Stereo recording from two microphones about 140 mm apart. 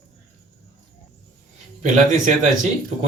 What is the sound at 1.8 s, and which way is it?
Speech, 60° right (ahead or behind).